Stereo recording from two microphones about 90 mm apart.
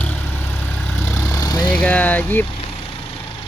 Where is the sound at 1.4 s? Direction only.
50° left (ahead or behind).